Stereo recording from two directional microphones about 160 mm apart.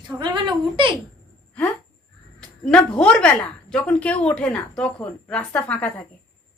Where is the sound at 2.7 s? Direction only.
5° left (ahead or behind).